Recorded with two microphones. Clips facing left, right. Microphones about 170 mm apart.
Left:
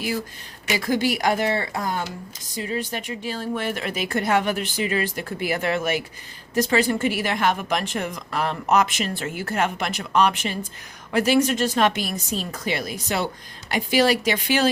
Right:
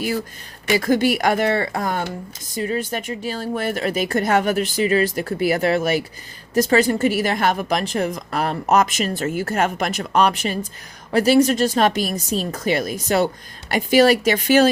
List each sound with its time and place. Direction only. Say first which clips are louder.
0.9 s speech: right 3 dB; 50° right (ahead or behind)